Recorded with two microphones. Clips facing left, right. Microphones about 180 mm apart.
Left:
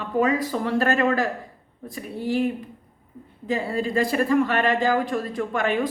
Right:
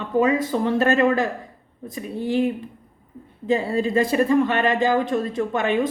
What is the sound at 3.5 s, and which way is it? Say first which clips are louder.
Speech: right 4 dB; 25° right (ahead or behind).